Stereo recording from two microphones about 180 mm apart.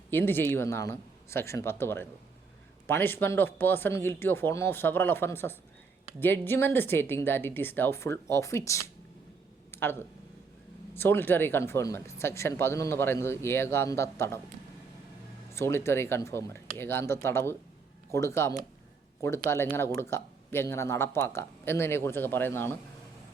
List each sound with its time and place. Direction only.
0.1 s speech: 10° left (ahead or behind)
15.5 s speech: 15° left (ahead or behind)